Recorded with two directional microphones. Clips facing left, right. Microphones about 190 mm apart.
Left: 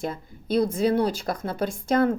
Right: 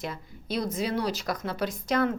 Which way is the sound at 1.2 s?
30° left (ahead or behind).